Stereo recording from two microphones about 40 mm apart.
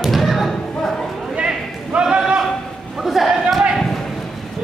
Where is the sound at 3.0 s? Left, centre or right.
Centre.